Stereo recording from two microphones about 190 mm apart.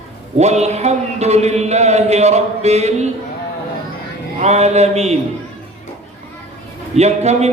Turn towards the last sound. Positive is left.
turn(degrees=-35)  # may be behind; listen again after turning